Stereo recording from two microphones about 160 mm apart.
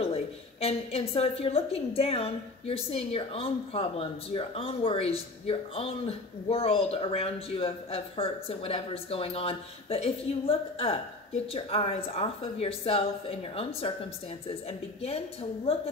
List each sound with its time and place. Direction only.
0.0 s speech: 40° left (ahead or behind)